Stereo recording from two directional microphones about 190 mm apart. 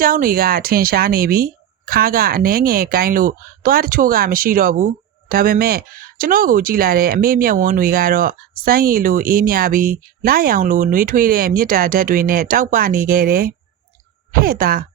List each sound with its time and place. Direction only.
0.0 s speech: 50° right (ahead or behind)